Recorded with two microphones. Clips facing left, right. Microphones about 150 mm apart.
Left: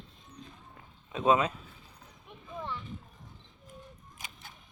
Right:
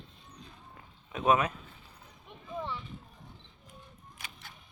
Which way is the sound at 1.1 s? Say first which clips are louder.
Left 1 dB; 25° left (ahead or behind).